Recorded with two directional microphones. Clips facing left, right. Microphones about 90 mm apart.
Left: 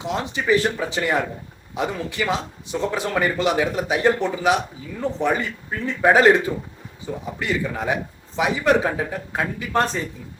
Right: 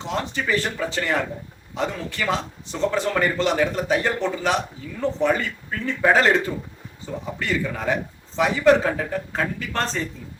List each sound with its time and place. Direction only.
0.0 s speech: 15° left (ahead or behind)